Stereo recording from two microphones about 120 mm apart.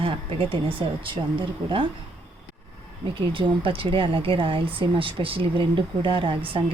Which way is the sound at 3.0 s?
45° right (ahead or behind).